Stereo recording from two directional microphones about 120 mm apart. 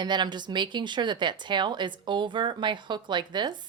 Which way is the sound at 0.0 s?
40° right (ahead or behind).